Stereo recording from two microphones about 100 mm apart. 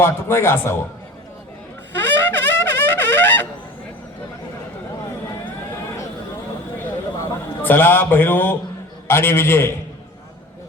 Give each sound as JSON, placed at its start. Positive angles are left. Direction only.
{"t": 0.0, "sound": "a man's voice", "side_deg": 25}
{"t": 2.0, "sound": "wind instrument", "side_deg": 20}
{"t": 7.2, "sound": "a man's voice", "side_deg": 20}